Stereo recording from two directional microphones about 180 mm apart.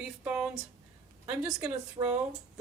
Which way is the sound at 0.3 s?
5° right (ahead or behind).